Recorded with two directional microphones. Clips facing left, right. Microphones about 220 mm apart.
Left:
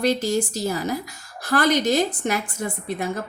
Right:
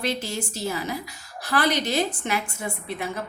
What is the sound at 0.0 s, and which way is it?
A woman's voice, 40° left (ahead or behind).